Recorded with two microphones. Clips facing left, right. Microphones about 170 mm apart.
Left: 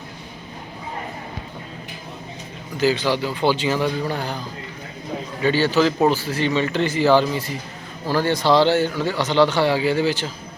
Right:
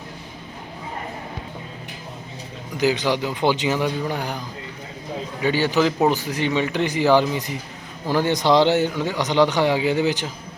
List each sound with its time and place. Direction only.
2.7 s speech: 15° right (ahead or behind)